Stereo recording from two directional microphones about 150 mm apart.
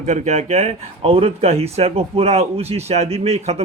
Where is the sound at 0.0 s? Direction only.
50° right (ahead or behind).